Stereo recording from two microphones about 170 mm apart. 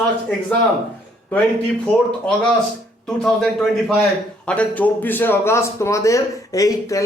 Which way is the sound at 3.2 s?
Centre (ahead or behind).